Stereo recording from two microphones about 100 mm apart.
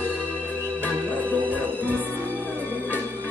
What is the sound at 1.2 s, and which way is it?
Music, 15° left (ahead or behind).